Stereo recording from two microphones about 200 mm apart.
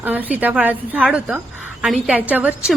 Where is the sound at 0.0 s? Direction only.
10° right (ahead or behind).